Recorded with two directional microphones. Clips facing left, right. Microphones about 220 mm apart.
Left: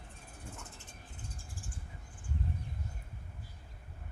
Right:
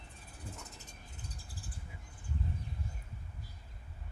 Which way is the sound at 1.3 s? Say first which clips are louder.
Left 1 dB; 35° right (ahead or behind).